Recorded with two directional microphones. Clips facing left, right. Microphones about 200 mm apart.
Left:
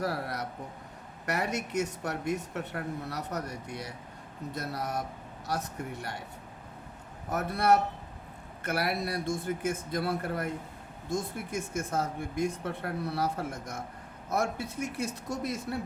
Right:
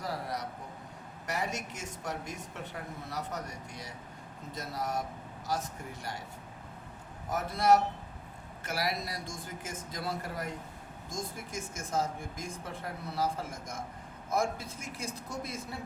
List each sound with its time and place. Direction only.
0.0 s a man's voice: 65° left (ahead or behind)
7.3 s speech: 60° left (ahead or behind)